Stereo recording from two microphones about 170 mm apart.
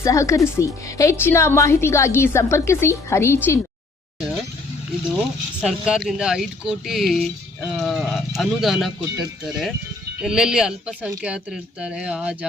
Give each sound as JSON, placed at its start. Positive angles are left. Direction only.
{"t": 0.0, "sound": "a woman's voice", "side_deg": 20}
{"t": 5.6, "sound": "speech", "side_deg": -5}